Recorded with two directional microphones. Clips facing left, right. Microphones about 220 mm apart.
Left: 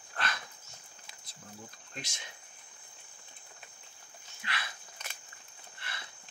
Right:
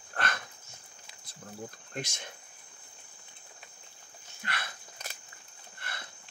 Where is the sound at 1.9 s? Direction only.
50° right (ahead or behind).